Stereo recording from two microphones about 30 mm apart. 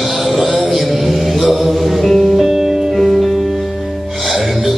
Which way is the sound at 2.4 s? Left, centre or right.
Centre.